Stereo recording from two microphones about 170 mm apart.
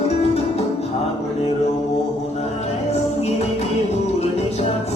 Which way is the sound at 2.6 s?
35° left (ahead or behind).